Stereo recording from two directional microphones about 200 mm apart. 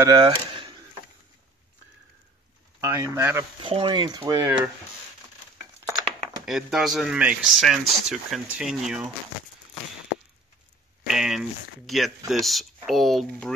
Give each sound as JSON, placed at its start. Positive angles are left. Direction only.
{"t": 0.0, "sound": "speech", "side_deg": -20}
{"t": 2.8, "sound": "speech", "side_deg": -15}
{"t": 3.6, "sound": "speech", "side_deg": -25}
{"t": 5.6, "sound": "a sound", "side_deg": -15}
{"t": 6.4, "sound": "speech", "side_deg": 0}
{"t": 11.1, "sound": "speech", "side_deg": 0}